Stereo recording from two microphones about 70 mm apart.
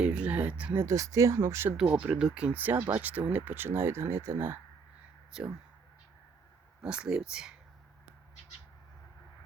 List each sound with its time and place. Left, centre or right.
0.0 s speech: centre
0.9 s speech: right
1.4 s speech: right
2.0 s speech: centre; by 4.5 s right
5.3 s speech: centre
6.8 s speech: centre